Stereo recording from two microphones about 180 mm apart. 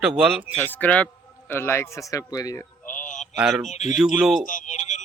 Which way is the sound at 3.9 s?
Centre (ahead or behind).